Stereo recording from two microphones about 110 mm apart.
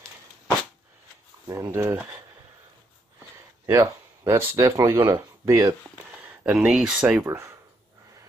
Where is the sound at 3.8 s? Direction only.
30° right (ahead or behind).